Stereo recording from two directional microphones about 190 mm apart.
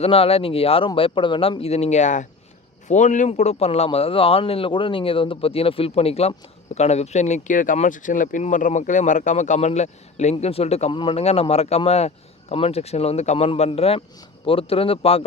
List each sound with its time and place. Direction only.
0.0 s speech: 30° left (ahead or behind)